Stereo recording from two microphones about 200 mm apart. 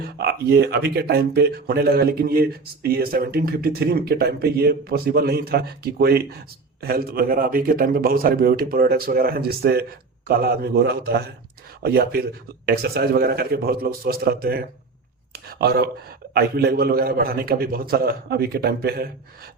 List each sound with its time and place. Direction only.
0.2 s speech: 55° right (ahead or behind)